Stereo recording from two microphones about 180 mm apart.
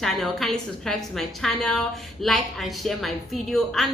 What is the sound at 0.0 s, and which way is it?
A woman's voice, centre (ahead or behind).